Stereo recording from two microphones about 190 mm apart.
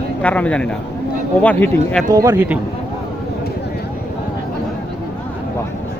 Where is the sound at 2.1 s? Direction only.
20° right (ahead or behind).